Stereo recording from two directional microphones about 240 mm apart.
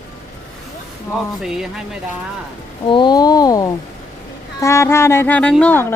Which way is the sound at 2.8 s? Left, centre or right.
Centre.